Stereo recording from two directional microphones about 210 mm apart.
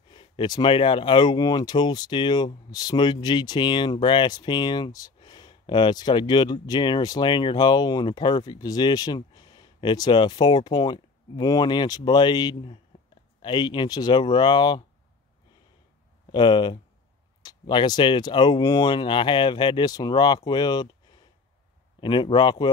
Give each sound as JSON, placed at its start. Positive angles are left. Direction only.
{"t": 0.1, "sound": "speech", "side_deg": 20}
{"t": 16.3, "sound": "speech", "side_deg": 20}
{"t": 22.0, "sound": "speech", "side_deg": 20}